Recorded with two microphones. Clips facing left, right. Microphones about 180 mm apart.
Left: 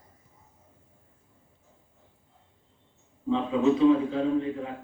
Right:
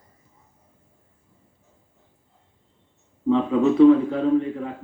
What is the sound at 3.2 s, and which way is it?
A man's voice, 60° right (ahead or behind).